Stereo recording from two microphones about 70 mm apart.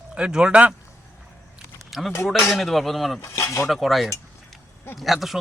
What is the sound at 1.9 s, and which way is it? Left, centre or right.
A man's voice, centre.